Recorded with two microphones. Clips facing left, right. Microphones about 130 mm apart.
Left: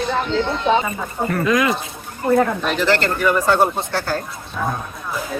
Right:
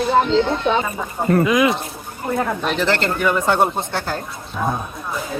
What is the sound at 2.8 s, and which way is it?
Speech, 25° right (ahead or behind).